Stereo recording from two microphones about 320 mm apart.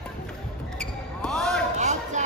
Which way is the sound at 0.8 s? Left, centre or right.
Centre.